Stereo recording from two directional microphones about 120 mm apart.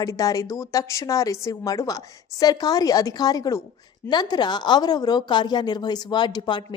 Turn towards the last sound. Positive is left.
turn(degrees=40)  # may be behind; listen again after turning